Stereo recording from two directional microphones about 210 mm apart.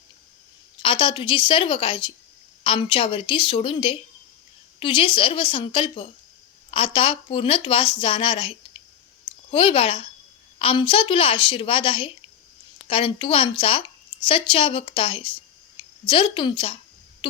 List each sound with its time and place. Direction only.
0.8 s a woman's voice: 25° left (ahead or behind)